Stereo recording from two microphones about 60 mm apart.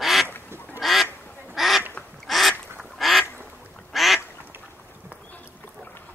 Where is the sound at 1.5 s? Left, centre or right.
Centre.